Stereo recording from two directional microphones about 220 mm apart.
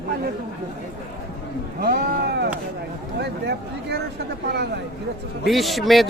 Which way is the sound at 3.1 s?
50° right (ahead or behind).